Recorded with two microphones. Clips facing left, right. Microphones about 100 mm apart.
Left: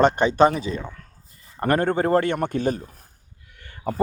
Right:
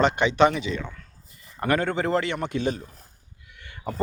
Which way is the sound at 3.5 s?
40° left (ahead or behind).